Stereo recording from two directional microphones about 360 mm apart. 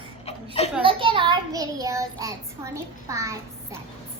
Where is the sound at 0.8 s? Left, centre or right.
Centre.